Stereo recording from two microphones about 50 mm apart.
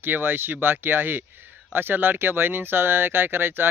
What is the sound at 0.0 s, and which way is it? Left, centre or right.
Speech, right.